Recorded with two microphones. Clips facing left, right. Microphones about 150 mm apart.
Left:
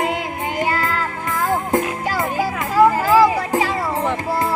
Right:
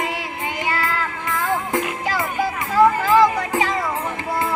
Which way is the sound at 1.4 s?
45° left (ahead or behind).